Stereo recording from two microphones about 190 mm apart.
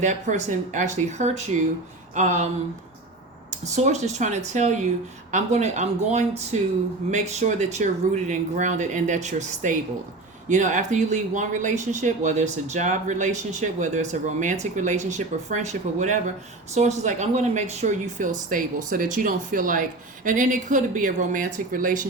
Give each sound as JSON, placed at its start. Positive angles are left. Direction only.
{"t": 0.0, "sound": "speech", "side_deg": -40}
{"t": 3.5, "sound": "speech", "side_deg": -35}